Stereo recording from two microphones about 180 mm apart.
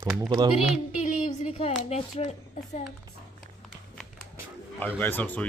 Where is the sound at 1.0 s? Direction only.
45° left (ahead or behind).